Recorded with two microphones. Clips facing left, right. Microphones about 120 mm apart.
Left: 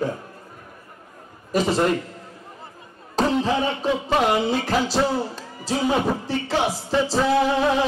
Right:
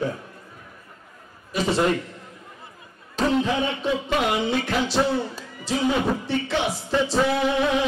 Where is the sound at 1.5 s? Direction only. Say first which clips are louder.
Left 2 dB; 40° left (ahead or behind).